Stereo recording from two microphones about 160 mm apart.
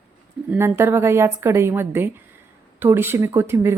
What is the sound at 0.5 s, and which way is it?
A woman's voice, 15° right (ahead or behind).